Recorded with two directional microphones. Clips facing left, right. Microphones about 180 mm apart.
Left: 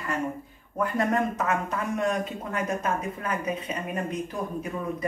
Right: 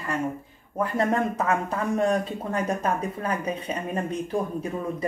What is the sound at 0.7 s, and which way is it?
Speech, 30° right (ahead or behind).